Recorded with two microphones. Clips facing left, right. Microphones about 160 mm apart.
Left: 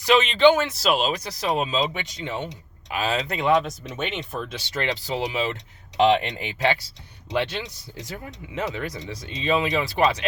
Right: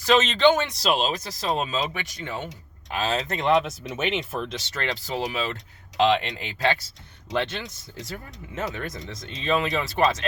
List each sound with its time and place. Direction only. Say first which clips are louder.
0.0 s speech: left 2 dB; 10° left (ahead or behind)
3.5 s speech: even; centre (ahead or behind)
4.4 s speech: left 2 dB; 15° left (ahead or behind)